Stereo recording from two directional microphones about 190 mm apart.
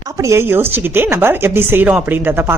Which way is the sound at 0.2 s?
15° right (ahead or behind).